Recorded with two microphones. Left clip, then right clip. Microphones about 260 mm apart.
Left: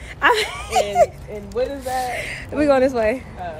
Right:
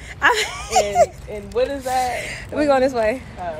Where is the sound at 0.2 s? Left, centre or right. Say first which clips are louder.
Even; centre.